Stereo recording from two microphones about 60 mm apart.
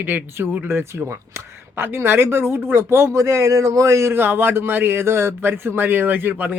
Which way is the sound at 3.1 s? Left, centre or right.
Right.